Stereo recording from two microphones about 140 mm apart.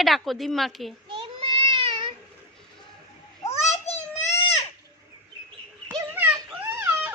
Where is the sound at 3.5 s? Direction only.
50° left (ahead or behind).